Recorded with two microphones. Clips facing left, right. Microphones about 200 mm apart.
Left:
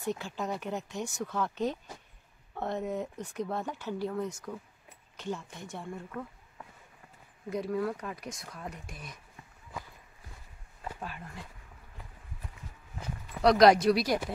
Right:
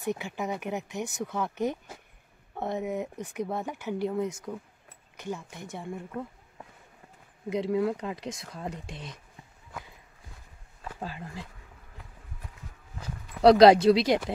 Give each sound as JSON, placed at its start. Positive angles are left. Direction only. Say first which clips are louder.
{"t": 0.0, "sound": "speech", "louder": "right 2 dB", "side_deg": -15}
{"t": 11.0, "sound": "speech", "louder": "right 4 dB", "side_deg": -30}
{"t": 13.4, "sound": "speech", "louder": "right 5 dB", "side_deg": -30}